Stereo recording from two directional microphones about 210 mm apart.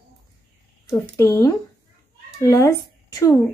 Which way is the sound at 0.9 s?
15° left (ahead or behind).